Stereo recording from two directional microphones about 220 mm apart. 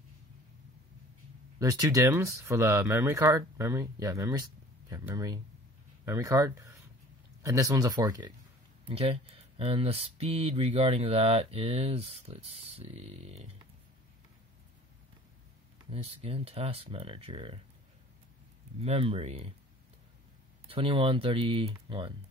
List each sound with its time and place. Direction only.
1.6 s speech: 15° right (ahead or behind)
15.9 s speech: 25° right (ahead or behind)
18.8 s speech: 25° right (ahead or behind)
20.6 s speech: 25° right (ahead or behind)